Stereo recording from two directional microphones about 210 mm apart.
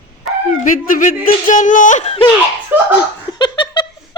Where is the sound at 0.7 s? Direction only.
40° left (ahead or behind).